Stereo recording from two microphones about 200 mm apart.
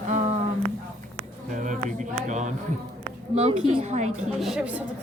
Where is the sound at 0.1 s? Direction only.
35° right (ahead or behind).